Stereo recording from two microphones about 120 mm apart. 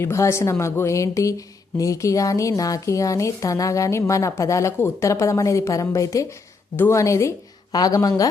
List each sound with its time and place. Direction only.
0.0 s speech: 25° left (ahead or behind)